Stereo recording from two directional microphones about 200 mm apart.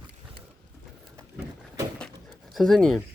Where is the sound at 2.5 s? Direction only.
Centre (ahead or behind).